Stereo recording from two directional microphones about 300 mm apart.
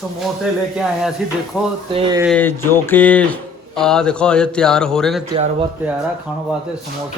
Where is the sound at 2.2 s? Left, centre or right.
Centre.